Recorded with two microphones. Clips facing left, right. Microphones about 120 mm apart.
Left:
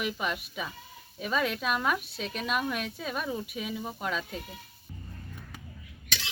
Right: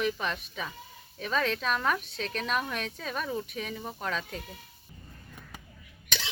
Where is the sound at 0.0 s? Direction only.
10° left (ahead or behind).